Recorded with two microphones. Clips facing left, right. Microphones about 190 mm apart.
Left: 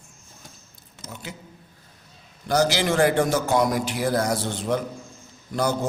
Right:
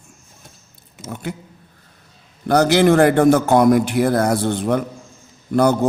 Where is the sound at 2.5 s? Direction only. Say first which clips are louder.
Right 8 dB; 60° right (ahead or behind).